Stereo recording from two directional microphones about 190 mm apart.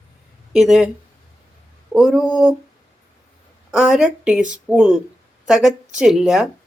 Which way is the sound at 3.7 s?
5° right (ahead or behind).